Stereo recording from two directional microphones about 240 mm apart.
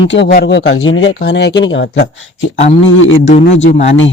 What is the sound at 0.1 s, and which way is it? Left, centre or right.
Speech, left.